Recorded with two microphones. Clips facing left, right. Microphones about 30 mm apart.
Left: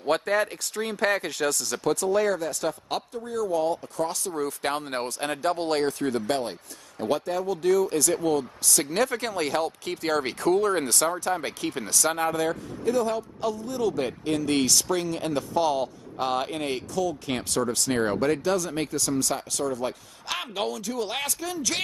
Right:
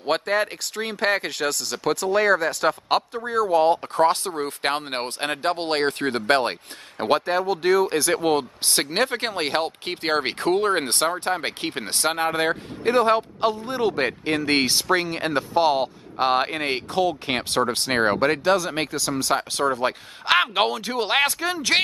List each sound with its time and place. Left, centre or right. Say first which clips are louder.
0.1 s speech: right 2 dB; right
3.1 s speech: right 6 dB; right
7.0 s a man's voice: right 5 dB; right
8.1 s speech: right 3 dB; right
18.9 s speech: right 1 dB; right
19.3 s a man's voice: right 6 dB; right